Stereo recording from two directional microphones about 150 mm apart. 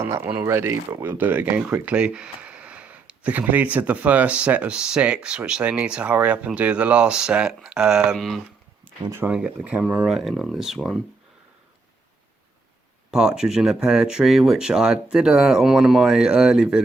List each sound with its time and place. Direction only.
0.0 s speech: 15° right (ahead or behind); by 8.4 s centre (ahead or behind)
9.0 s speech: 20° right (ahead or behind)
9.3 s speech: 5° right (ahead or behind)
13.1 s speech: 5° right (ahead or behind)